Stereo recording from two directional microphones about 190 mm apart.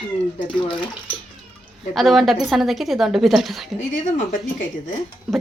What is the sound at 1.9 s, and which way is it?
A woman's voice, centre (ahead or behind).